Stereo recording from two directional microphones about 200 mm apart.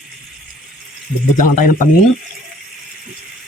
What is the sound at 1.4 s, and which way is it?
Speech, 40° left (ahead or behind).